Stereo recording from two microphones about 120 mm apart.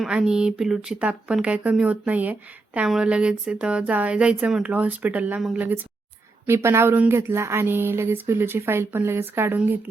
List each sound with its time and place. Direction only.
0.0 s speech: 5° right (ahead or behind)